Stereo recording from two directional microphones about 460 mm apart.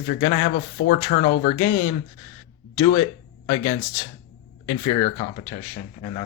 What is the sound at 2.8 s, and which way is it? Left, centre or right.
Speech, centre.